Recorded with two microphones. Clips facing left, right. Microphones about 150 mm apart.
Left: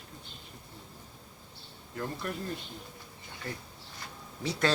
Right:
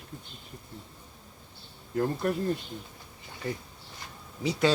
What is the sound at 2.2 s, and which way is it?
Speech, 45° right (ahead or behind).